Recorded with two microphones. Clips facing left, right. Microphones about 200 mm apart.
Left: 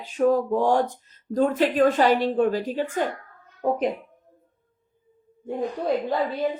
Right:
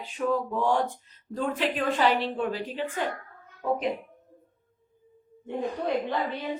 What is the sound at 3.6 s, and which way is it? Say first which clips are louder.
Speech: left 4 dB; 40° left (ahead or behind).